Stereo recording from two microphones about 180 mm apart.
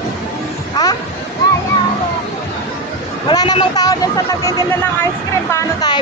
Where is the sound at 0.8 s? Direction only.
20° left (ahead or behind).